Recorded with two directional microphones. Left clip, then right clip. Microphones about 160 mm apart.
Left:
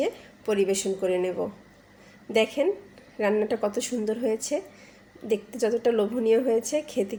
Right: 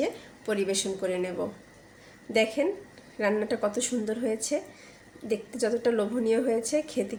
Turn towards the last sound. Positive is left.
turn(degrees=20)  # may be behind; listen again after turning